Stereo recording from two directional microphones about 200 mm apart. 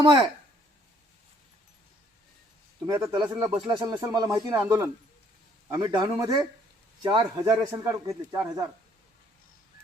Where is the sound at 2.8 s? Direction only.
20° right (ahead or behind).